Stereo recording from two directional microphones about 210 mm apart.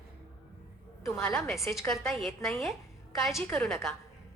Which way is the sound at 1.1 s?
5° left (ahead or behind).